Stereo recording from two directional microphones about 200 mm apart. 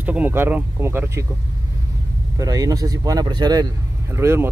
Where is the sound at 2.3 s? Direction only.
15° right (ahead or behind).